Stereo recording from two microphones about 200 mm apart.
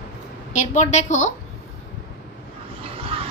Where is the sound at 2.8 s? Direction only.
30° right (ahead or behind).